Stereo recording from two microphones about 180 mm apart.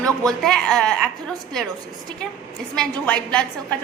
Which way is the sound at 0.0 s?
5° left (ahead or behind).